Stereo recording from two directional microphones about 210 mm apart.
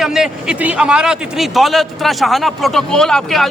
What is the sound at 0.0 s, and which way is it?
A man's voice, centre (ahead or behind).